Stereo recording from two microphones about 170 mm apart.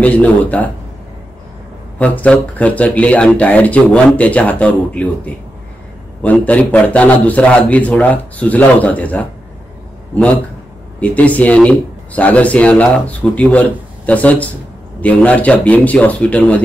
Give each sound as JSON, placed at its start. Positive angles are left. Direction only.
{"t": 0.0, "sound": "speech", "side_deg": 10}
{"t": 2.0, "sound": "speech", "side_deg": 10}